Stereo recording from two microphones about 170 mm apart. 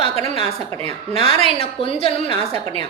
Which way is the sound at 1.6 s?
35° left (ahead or behind).